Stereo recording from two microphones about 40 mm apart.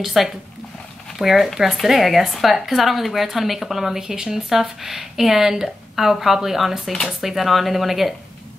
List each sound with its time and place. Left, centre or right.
0.0 s a woman's voice: centre